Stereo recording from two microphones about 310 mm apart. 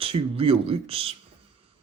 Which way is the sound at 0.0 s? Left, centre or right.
Centre.